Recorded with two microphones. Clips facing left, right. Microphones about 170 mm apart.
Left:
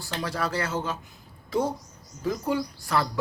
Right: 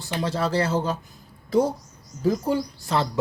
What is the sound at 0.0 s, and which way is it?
Speech, 25° right (ahead or behind).